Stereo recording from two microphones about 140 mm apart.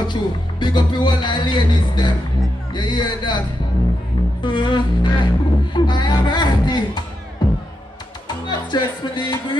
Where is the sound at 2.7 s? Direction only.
35° left (ahead or behind).